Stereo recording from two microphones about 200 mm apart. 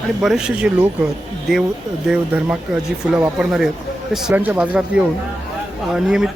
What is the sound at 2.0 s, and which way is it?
Speech, 5° right (ahead or behind).